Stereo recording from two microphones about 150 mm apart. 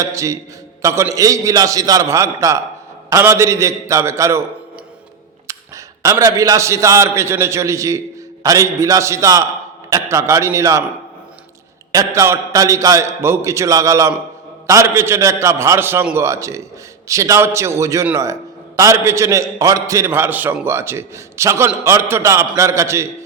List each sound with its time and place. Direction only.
0.0 s a man's voice: 20° right (ahead or behind)
5.5 s a man's voice: 20° right (ahead or behind)
11.9 s a man's voice: 20° right (ahead or behind)